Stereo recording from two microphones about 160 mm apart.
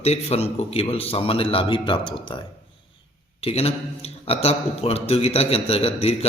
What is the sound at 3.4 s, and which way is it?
A man's voice, 40° left (ahead or behind).